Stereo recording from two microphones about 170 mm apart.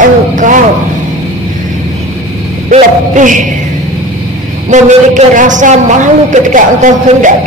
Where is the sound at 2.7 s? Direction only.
50° right (ahead or behind).